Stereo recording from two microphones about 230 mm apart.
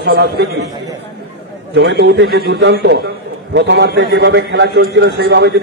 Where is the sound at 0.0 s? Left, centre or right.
Right.